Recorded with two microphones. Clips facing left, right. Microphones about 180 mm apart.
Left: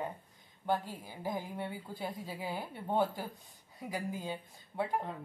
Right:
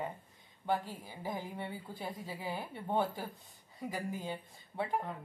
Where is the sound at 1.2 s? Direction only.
Centre (ahead or behind).